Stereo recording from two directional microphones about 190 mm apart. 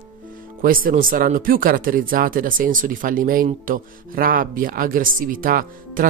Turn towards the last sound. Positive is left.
turn(degrees=-50)  # may be behind; listen again after turning